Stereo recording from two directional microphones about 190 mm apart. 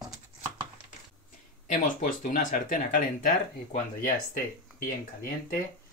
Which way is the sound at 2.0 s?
45° left (ahead or behind).